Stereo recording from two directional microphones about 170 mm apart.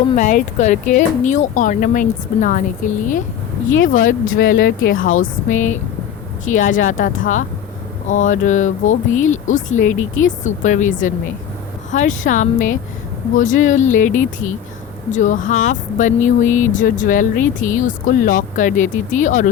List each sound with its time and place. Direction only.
0.2 s speech: 45° left (ahead or behind)